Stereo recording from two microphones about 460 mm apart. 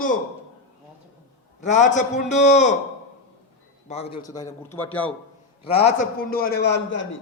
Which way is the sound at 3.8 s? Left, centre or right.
Centre.